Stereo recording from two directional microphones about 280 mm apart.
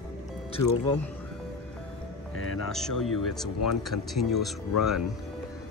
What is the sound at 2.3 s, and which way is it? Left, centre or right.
Music, left.